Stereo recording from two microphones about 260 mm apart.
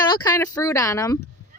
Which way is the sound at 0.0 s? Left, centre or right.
Centre.